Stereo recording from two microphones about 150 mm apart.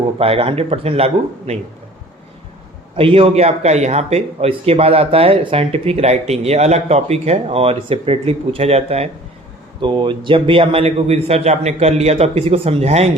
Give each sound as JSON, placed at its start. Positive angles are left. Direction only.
{"t": 0.2, "sound": "speech", "side_deg": -40}
{"t": 2.9, "sound": "speech", "side_deg": -35}
{"t": 9.8, "sound": "speech", "side_deg": -30}